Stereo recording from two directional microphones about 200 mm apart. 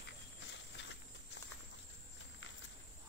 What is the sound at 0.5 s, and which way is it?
Clip-clop, 60° left (ahead or behind).